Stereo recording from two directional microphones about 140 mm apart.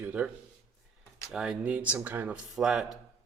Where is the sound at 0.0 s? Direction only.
10° right (ahead or behind).